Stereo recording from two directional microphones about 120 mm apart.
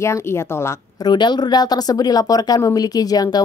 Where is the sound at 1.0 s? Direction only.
40° left (ahead or behind).